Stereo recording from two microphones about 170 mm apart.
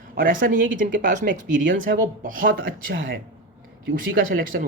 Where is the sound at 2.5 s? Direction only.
80° right.